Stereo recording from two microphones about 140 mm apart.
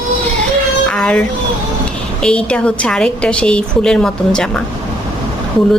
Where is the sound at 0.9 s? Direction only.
10° left (ahead or behind).